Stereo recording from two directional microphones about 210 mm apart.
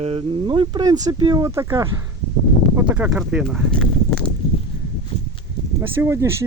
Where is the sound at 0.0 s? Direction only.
25° right (ahead or behind); by 3.8 s centre (ahead or behind).